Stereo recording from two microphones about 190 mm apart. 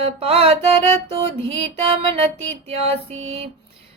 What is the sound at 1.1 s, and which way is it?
Female singing, 30° right (ahead or behind).